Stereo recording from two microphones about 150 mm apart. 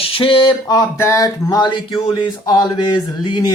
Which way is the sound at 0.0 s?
35° left (ahead or behind).